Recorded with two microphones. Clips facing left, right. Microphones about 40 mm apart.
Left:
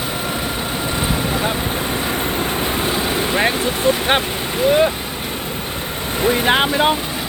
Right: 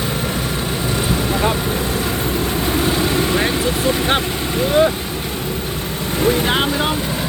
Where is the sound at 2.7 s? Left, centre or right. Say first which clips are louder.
Right 2 dB; centre.